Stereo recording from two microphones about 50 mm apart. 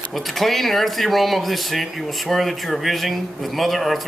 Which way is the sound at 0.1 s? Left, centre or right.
Centre.